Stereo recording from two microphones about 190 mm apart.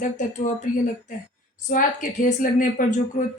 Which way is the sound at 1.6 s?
45° left (ahead or behind).